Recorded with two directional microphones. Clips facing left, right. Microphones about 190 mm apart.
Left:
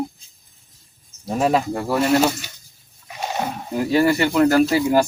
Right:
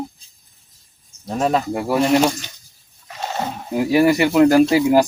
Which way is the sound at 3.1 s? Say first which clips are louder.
Even; 15° left (ahead or behind).